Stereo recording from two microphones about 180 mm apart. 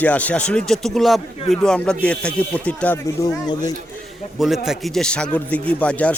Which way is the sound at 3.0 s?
20° left (ahead or behind).